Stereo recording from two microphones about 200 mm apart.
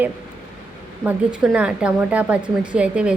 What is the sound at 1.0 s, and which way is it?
A woman's voice, 5° right (ahead or behind).